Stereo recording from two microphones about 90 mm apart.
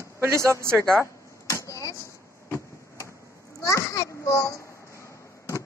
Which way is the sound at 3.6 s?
40° left (ahead or behind).